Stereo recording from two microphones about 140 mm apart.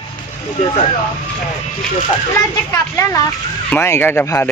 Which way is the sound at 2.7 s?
25° left (ahead or behind).